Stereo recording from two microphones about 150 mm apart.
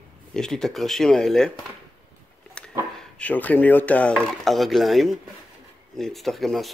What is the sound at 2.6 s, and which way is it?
Dog, 5° left (ahead or behind).